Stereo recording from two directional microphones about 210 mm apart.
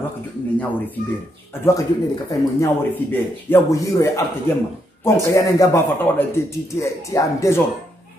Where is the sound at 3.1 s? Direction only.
10° left (ahead or behind).